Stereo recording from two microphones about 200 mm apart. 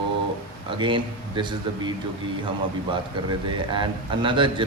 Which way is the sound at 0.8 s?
25° right (ahead or behind).